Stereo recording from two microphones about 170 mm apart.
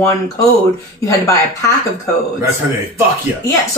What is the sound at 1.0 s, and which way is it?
Speech, 20° left (ahead or behind).